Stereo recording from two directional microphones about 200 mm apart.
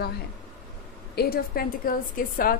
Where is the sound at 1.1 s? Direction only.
50° left (ahead or behind).